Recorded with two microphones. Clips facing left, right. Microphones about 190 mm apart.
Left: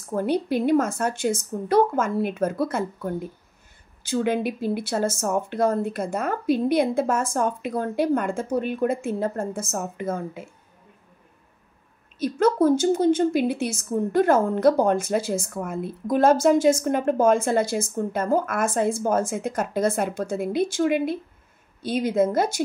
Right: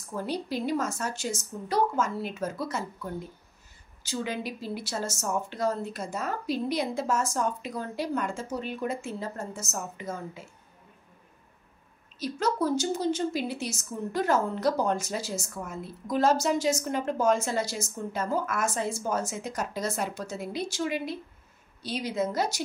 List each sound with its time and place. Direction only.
0.1 s speech: 55° left (ahead or behind)
12.2 s a woman's voice: 55° left (ahead or behind)